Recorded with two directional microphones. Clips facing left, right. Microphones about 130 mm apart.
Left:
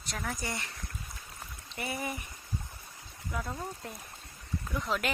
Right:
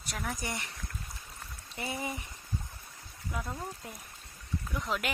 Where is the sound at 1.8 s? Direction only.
20° right (ahead or behind).